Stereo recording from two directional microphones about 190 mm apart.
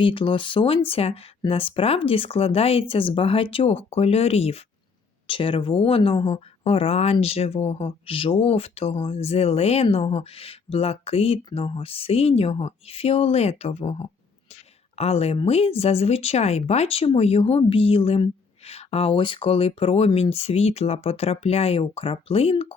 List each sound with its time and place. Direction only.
0.0 s speech: 25° left (ahead or behind)